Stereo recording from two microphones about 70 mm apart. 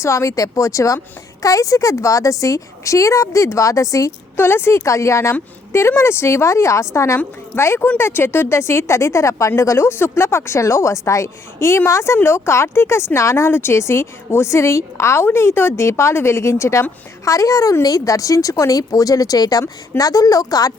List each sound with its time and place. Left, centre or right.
0.0 s a woman's voice: left
4.4 s a woman's voice: left